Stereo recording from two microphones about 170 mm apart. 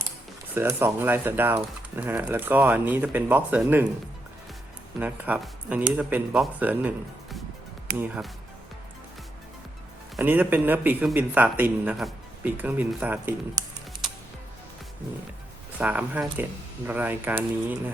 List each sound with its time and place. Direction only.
0.5 s speech: 15° right (ahead or behind)
4.9 s speech: 10° right (ahead or behind)
10.2 s speech: 10° right (ahead or behind)
13.6 s speech: 25° right (ahead or behind)
15.8 s speech: 10° right (ahead or behind)